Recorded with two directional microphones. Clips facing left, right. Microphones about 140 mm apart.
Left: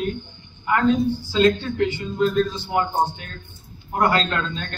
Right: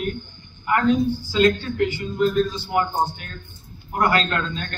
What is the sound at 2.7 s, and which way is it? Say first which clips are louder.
A man's voice: left 1 dB; 20° left (ahead or behind).